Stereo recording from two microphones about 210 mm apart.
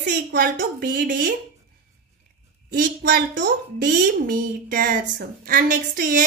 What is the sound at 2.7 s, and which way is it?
Speech, 45° right (ahead or behind).